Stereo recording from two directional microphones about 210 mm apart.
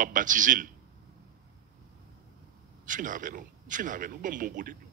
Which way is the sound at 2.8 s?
40° right (ahead or behind).